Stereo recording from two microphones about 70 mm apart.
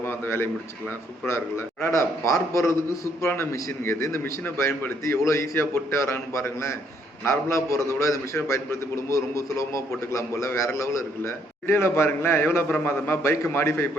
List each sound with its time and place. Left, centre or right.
0.0 s a man's voice: left